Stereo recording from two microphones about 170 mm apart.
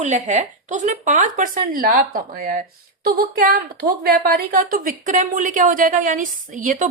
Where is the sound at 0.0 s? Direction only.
45° right (ahead or behind).